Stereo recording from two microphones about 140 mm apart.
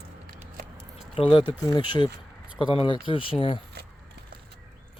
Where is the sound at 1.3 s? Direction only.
30° left (ahead or behind).